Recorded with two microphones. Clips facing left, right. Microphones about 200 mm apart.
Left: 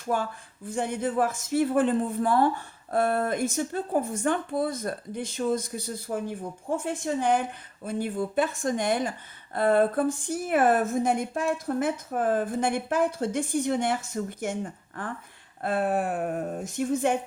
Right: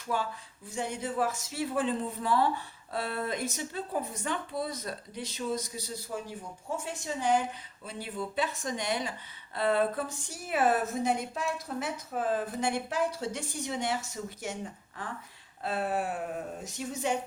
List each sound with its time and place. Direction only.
0.1 s speech: 50° left (ahead or behind)